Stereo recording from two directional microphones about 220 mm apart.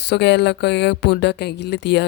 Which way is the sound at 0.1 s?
50° left (ahead or behind).